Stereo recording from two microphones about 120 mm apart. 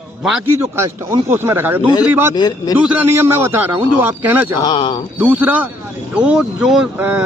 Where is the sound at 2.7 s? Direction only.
10° right (ahead or behind).